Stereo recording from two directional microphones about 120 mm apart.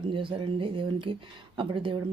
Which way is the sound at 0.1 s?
45° right (ahead or behind).